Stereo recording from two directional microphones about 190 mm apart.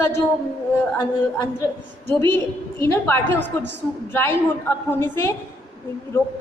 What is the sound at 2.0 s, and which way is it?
A woman's voice, 10° left (ahead or behind).